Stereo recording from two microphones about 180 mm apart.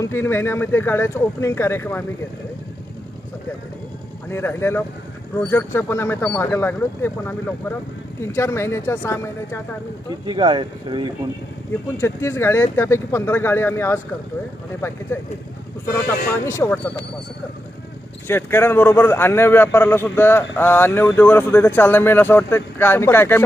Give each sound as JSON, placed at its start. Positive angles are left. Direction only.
{"t": 0.0, "sound": "a man's voice", "side_deg": 15}
{"t": 4.3, "sound": "a man's voice", "side_deg": 15}
{"t": 10.2, "sound": "speech", "side_deg": -25}
{"t": 11.9, "sound": "a man's voice", "side_deg": 15}
{"t": 16.5, "sound": "a man's voice", "side_deg": 10}
{"t": 18.3, "sound": "a man's voice", "side_deg": 10}